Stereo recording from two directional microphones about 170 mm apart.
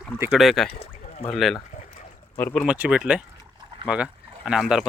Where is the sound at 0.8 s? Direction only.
35° left (ahead or behind).